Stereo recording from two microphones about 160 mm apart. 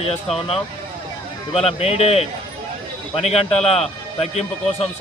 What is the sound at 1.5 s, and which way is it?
Speech, 40° left (ahead or behind).